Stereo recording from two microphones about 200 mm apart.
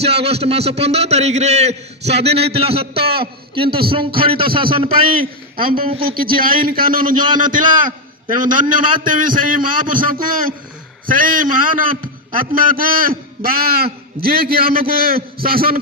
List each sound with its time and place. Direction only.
0.0 s a man's voice: 30° right (ahead or behind)
5.6 s a man's voice: 45° right (ahead or behind)
5.9 s a man's voice: 25° right (ahead or behind)
6.1 s a man's voice: 45° right (ahead or behind)